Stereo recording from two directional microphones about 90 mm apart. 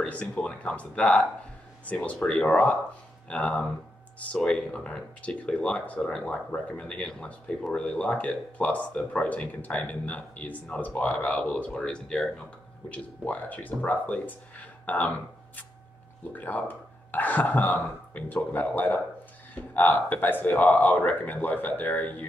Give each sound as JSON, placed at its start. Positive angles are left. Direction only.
{"t": 0.0, "sound": "speech", "side_deg": 10}
{"t": 16.3, "sound": "speech", "side_deg": 20}